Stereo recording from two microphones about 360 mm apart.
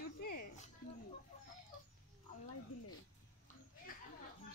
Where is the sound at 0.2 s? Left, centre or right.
Left.